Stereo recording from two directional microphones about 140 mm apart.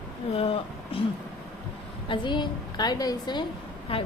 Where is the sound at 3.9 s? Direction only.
40° left (ahead or behind).